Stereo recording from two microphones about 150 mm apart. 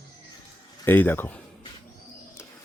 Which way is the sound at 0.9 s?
10° left (ahead or behind).